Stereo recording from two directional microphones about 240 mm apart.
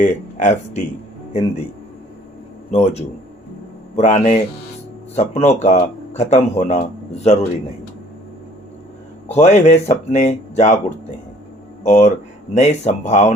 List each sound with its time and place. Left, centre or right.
0.0 s speech: left
2.6 s a man's voice: left
9.2 s speech: left